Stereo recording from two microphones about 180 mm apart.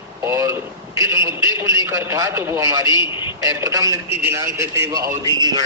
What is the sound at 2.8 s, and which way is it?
Speech, 25° left (ahead or behind).